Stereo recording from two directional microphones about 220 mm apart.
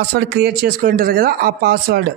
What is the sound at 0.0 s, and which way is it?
Speech, 50° right (ahead or behind).